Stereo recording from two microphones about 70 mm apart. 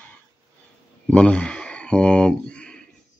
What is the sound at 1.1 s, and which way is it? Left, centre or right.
Speech, centre.